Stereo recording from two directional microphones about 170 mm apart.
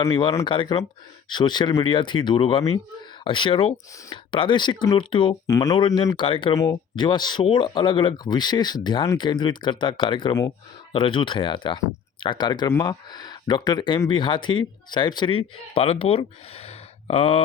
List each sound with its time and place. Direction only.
0.1 s speech: 30° left (ahead or behind)
5.5 s speech: 20° left (ahead or behind)
5.7 s speech: 30° left (ahead or behind)